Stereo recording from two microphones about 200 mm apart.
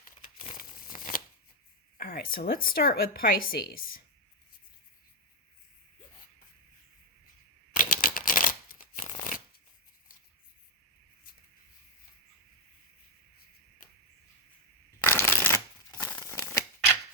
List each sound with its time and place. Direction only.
0.5 s crumpling: 45° left (ahead or behind)
2.0 s speech: 45° left (ahead or behind)
7.8 s shuffling cards: 45° left (ahead or behind)
15.0 s shuffling cards: 10° left (ahead or behind)